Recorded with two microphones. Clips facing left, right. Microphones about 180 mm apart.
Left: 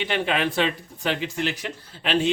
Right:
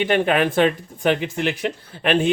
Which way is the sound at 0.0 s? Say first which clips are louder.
Right 6 dB; 50° right (ahead or behind).